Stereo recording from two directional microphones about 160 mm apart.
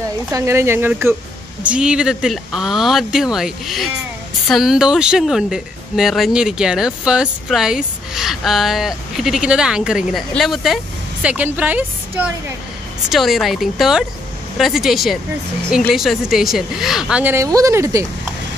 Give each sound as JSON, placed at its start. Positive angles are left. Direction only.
{"t": 0.3, "sound": "speech", "side_deg": -15}